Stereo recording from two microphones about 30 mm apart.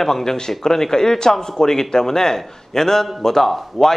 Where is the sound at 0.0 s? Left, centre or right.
Centre.